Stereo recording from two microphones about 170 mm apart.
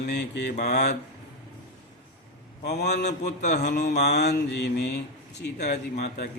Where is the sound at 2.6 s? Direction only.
75° left (ahead or behind).